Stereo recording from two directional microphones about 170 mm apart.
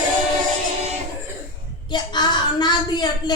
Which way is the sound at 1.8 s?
25° left (ahead or behind).